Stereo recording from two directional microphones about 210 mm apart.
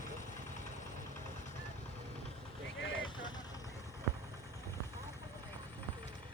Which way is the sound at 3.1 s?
20° left (ahead or behind).